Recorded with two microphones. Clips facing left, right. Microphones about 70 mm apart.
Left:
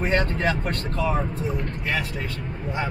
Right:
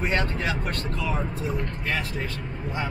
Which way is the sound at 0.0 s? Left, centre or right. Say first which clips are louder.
Left 3 dB; left.